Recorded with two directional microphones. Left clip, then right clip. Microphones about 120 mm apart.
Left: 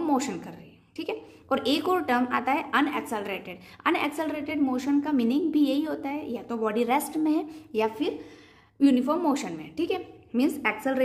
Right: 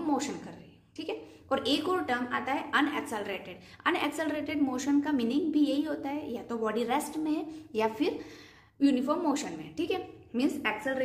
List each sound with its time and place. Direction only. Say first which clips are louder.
0.0 s a sound: left 5 dB; 50° left (ahead or behind)
0.9 s a woman's voice: left 4 dB; 40° left (ahead or behind)
7.7 s a woman's voice: left 3 dB; 25° left (ahead or behind)
8.7 s a woman's voice: left 4 dB; 35° left (ahead or behind)